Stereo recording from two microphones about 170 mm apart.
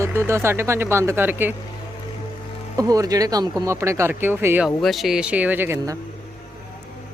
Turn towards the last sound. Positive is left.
turn(degrees=-15)  # may be behind; listen again after turning